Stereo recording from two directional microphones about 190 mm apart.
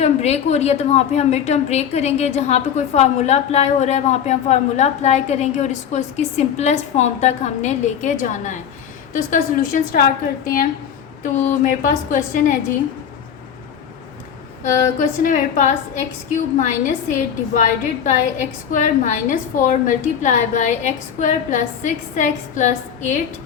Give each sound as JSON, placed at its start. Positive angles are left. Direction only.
{"t": 0.0, "sound": "a woman's voice", "side_deg": 35}
{"t": 11.2, "sound": "a woman's voice", "side_deg": 45}
{"t": 14.6, "sound": "a woman's voice", "side_deg": 45}